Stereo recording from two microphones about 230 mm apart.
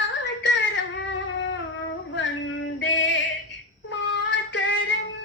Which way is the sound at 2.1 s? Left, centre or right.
Left.